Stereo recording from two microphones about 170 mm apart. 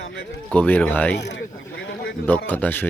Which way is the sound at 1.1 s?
90° left.